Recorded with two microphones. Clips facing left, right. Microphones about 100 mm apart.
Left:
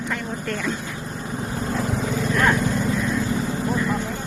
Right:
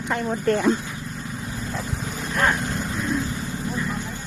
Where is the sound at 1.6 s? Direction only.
80° left.